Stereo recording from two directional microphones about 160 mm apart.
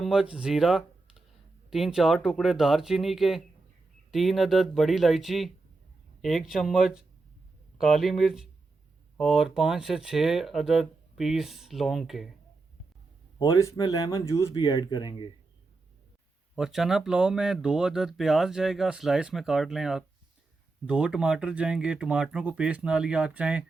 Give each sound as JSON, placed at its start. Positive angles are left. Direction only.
{"t": 0.0, "sound": "speech", "side_deg": -5}
{"t": 13.4, "sound": "speech", "side_deg": 20}
{"t": 16.6, "sound": "speech", "side_deg": -5}